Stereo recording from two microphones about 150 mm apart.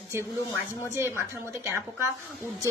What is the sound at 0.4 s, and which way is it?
Speech, 20° left (ahead or behind).